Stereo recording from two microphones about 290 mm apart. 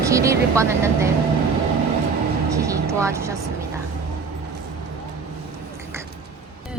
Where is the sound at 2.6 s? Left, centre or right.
Centre.